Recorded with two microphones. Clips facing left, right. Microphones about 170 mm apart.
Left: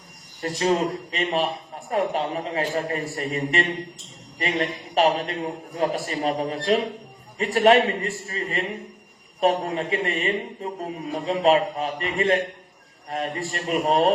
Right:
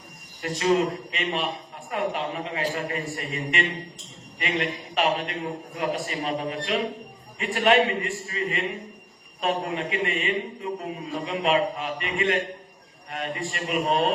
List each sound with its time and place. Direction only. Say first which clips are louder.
0.4 s a man's voice: even; 35° left (ahead or behind)